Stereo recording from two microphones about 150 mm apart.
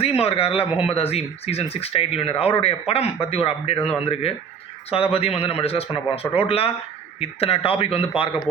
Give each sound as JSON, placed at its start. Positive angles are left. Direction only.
{"t": 0.0, "sound": "speech", "side_deg": 40}